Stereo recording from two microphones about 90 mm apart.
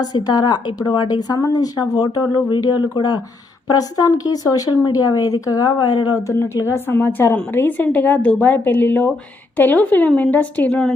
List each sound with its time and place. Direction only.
0.0 s speech: 50° left (ahead or behind)
6.4 s a woman's voice: 30° left (ahead or behind)